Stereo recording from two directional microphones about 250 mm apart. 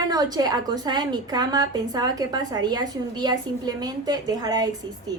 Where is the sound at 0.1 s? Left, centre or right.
Centre.